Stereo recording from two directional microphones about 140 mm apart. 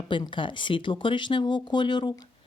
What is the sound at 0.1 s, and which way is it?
Speech, 35° left (ahead or behind).